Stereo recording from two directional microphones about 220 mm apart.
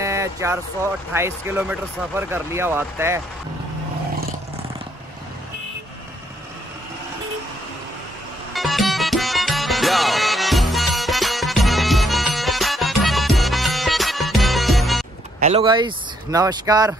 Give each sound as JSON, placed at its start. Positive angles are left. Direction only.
{"t": 0.0, "sound": "a sound", "side_deg": -15}
{"t": 1.1, "sound": "speech", "side_deg": -10}
{"t": 8.5, "sound": "music", "side_deg": 0}
{"t": 15.4, "sound": "speech", "side_deg": -25}